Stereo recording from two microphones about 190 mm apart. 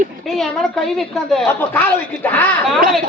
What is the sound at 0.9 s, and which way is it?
A woman's voice, centre (ahead or behind).